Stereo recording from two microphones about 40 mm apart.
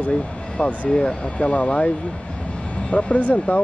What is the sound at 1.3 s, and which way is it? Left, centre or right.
Speech, left.